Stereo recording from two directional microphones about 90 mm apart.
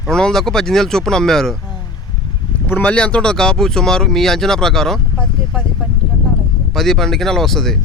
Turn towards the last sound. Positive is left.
turn(degrees=5)  # may be behind; listen again after turning